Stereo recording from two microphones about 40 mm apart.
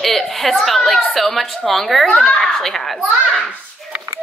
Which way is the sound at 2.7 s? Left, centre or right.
Centre.